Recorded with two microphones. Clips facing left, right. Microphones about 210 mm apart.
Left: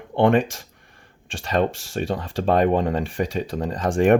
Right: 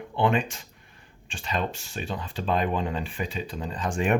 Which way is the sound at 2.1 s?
65° left (ahead or behind).